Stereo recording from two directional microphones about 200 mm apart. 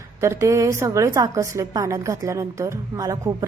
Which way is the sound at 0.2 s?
15° right (ahead or behind).